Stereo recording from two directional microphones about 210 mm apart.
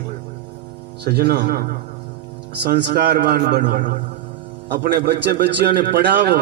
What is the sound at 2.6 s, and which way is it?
A man's voice, 50° right (ahead or behind).